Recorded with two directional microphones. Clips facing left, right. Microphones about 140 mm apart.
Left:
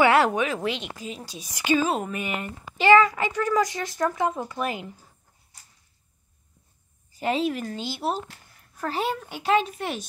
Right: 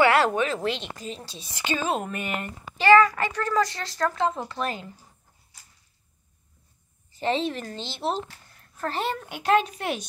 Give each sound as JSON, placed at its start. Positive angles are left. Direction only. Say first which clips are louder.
{"t": 0.0, "sound": "speech", "louder": "left 1 dB", "side_deg": 15}
{"t": 2.8, "sound": "speech", "louder": "even", "side_deg": 15}
{"t": 7.1, "sound": "speech", "louder": "left 1 dB", "side_deg": 10}